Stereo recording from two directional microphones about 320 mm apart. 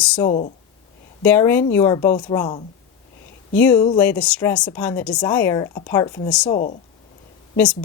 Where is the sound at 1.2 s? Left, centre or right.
Centre.